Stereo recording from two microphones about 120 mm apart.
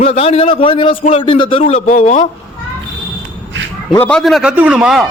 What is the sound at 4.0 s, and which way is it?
A man's voice, 10° left (ahead or behind).